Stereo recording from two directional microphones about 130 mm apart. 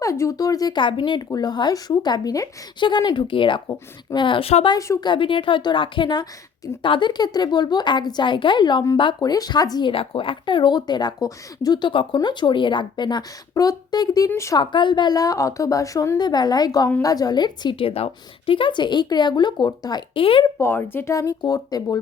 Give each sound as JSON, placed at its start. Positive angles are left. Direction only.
{"t": 0.0, "sound": "speech", "side_deg": 25}
{"t": 4.7, "sound": "speech", "side_deg": 30}
{"t": 5.0, "sound": "speech", "side_deg": 40}
{"t": 9.9, "sound": "speech", "side_deg": 45}
{"t": 14.6, "sound": "speech", "side_deg": 40}
{"t": 20.6, "sound": "speech", "side_deg": 15}